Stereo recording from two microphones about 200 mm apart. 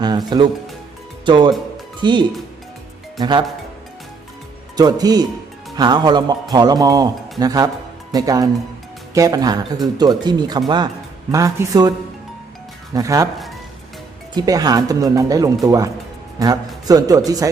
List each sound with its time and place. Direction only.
0.0 s music: 20° right (ahead or behind)
1.2 s speech: 25° right (ahead or behind)
4.8 s speech: 20° right (ahead or behind)
14.3 s speech: 20° right (ahead or behind)